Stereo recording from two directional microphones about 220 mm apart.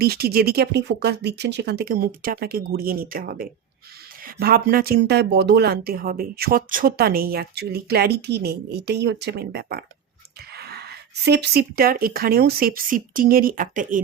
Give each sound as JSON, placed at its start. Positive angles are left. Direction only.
{"t": 0.0, "sound": "speech", "side_deg": -45}